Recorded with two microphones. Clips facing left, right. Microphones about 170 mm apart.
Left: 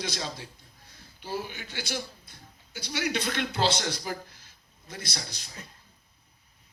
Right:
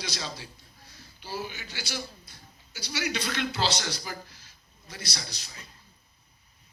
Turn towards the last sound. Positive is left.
turn(degrees=50)  # may be behind; listen again after turning